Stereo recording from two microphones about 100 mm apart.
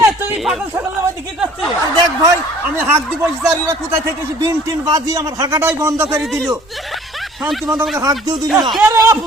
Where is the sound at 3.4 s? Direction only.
30° right (ahead or behind).